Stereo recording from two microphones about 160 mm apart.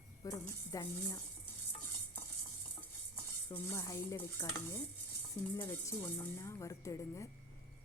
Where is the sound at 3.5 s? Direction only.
20° left (ahead or behind).